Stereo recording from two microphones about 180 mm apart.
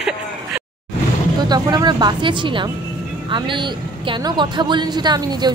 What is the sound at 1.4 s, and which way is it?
A woman's voice, 20° right (ahead or behind).